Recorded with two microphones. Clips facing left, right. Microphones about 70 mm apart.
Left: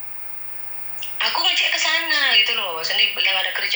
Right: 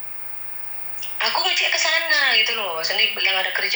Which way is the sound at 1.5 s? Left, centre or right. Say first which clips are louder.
Even; left.